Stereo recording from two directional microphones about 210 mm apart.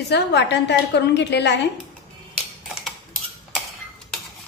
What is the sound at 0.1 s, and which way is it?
A woman's voice, 55° left (ahead or behind).